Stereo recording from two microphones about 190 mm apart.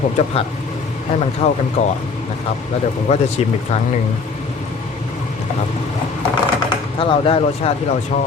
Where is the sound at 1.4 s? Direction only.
30° left (ahead or behind).